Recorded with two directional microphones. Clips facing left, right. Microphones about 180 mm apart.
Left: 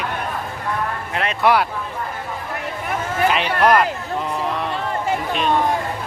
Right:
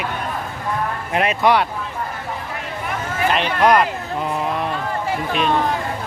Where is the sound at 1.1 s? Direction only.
10° right (ahead or behind).